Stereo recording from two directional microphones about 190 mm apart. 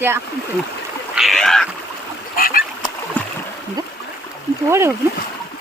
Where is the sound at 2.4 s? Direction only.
50° left (ahead or behind).